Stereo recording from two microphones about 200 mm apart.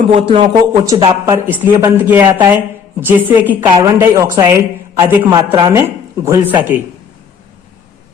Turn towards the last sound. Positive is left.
turn(degrees=-10)  # may be behind; listen again after turning